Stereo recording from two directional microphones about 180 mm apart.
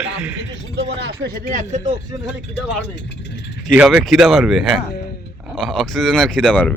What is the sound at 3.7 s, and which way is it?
Speech, centre (ahead or behind).